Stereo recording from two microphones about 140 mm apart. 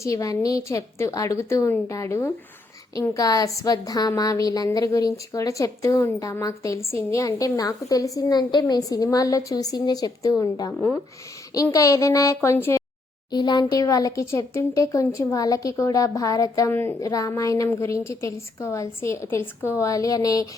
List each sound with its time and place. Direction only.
0.0 s a woman's voice: 25° left (ahead or behind)
13.3 s a woman's voice: 30° left (ahead or behind)